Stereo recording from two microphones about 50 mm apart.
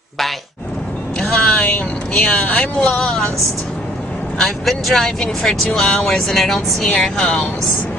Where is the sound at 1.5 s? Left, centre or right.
Left.